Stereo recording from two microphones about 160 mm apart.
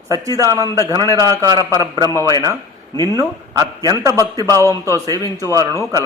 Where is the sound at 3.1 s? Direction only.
20° right (ahead or behind).